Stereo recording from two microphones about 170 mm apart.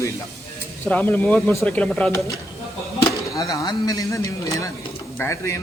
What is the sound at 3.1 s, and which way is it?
Speech, 20° left (ahead or behind).